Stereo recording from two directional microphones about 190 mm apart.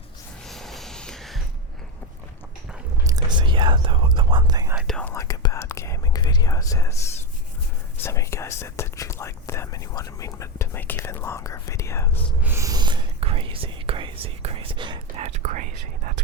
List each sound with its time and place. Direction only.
0.4 s snort: centre (ahead or behind)
3.0 s whispering: 20° right (ahead or behind)
4.7 s whispering: centre (ahead or behind); by 6.9 s 15° left (ahead or behind)
8.0 s whispering: 15° left (ahead or behind)
12.4 s whispering: 15° right (ahead or behind); by 15.6 s 40° right (ahead or behind)